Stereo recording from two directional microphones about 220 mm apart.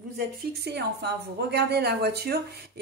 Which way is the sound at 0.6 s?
50° right (ahead or behind).